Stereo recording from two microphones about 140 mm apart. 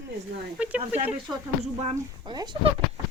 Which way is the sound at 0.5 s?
10° right (ahead or behind).